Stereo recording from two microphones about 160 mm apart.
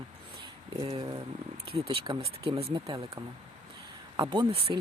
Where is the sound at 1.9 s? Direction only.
35° right (ahead or behind).